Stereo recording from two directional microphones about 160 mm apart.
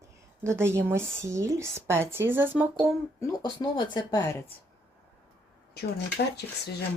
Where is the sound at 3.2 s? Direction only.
25° left (ahead or behind).